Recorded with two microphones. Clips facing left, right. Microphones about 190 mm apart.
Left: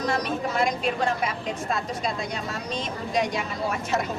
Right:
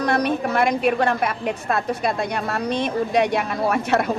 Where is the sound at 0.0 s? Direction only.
60° right (ahead or behind).